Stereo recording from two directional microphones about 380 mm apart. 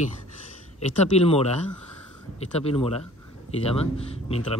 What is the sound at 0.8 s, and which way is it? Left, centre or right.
Speech, centre.